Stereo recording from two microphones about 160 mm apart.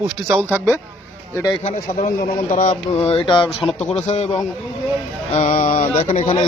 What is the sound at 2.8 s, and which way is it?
Speech, 40° left (ahead or behind).